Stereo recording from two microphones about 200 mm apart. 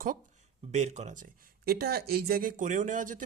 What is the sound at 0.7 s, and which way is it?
Speech, 35° right (ahead or behind).